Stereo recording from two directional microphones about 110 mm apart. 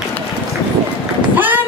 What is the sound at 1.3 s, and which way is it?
Run, 15° right (ahead or behind).